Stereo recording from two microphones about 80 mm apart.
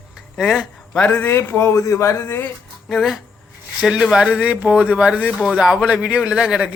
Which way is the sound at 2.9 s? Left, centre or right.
Centre.